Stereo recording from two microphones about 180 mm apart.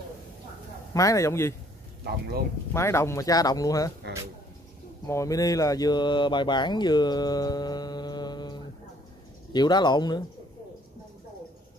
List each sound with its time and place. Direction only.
0.9 s a man's voice: 20° left (ahead or behind)
2.7 s speech: 15° left (ahead or behind)
5.0 s speech: 20° left (ahead or behind)